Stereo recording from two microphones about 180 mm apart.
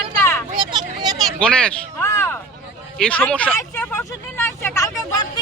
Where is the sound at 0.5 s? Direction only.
25° right (ahead or behind).